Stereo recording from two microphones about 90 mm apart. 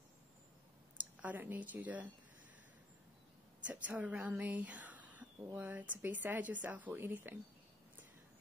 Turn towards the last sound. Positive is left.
turn(degrees=-20)  # may be behind; listen again after turning